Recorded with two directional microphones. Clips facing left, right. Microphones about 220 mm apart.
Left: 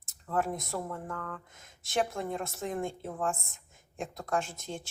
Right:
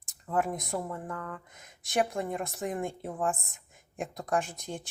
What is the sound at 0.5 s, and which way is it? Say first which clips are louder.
Speech: right 2 dB; 15° right (ahead or behind).